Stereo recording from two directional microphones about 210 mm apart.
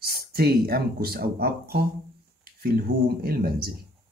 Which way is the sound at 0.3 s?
50° right (ahead or behind).